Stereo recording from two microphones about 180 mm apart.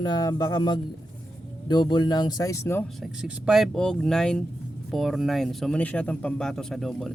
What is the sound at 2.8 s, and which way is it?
Speech, 5° right (ahead or behind).